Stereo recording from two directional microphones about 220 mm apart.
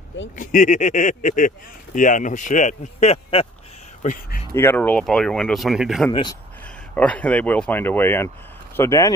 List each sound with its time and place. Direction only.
0.4 s speech: 35° left (ahead or behind)
4.6 s speech: 10° left (ahead or behind)